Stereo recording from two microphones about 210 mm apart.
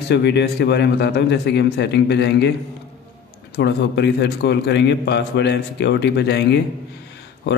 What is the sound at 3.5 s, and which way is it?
Speech, 55° left (ahead or behind).